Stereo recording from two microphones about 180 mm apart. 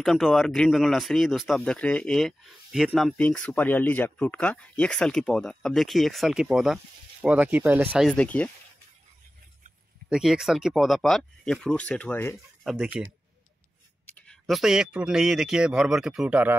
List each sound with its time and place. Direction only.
0.0 s speech: centre (ahead or behind)
8.1 s speech: 5° left (ahead or behind)
10.0 s speech: 5° right (ahead or behind)
12.6 s speech: 5° right (ahead or behind)
14.0 s speech: 5° left (ahead or behind)